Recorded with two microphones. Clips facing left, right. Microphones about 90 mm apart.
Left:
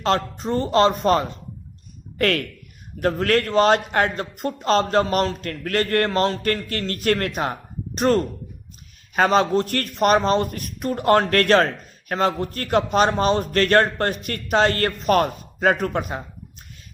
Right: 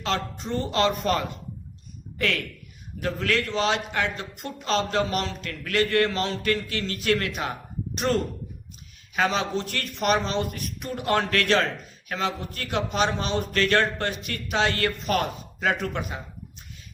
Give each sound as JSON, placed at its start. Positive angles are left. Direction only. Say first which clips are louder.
{"t": 0.0, "sound": "speech", "louder": "left 7 dB", "side_deg": 40}
{"t": 2.1, "sound": "speech", "louder": "left 6 dB", "side_deg": 50}